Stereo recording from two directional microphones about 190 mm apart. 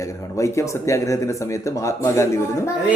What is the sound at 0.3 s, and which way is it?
Speech, 15° left (ahead or behind).